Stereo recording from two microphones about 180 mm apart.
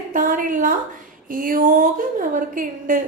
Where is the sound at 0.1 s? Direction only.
50° right (ahead or behind).